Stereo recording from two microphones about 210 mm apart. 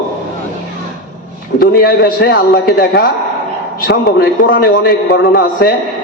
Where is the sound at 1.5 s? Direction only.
45° left (ahead or behind).